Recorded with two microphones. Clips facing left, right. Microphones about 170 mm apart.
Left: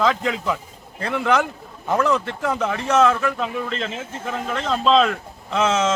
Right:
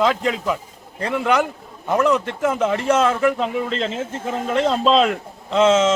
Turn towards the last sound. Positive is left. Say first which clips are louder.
# right 5 dB
turn(degrees=-25)  # may be behind; listen again after turning